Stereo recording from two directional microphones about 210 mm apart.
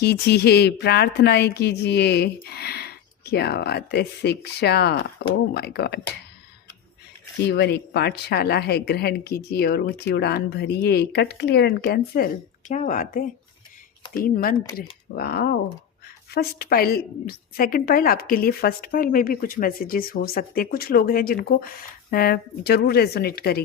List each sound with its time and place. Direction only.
0.0 s speech: 50° left (ahead or behind)
7.4 s speech: 55° left (ahead or behind)